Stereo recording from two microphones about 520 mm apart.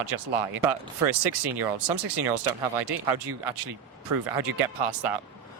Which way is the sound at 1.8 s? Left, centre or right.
Right.